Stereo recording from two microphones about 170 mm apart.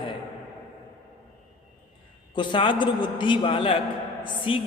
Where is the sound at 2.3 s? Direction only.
30° left (ahead or behind).